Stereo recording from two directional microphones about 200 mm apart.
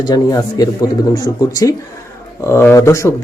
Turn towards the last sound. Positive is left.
turn(degrees=15)  # may be behind; listen again after turning